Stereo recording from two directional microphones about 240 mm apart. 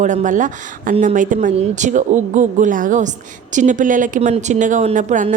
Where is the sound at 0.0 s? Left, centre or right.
Right.